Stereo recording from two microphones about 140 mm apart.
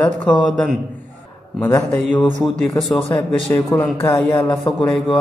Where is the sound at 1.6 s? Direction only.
15° left (ahead or behind).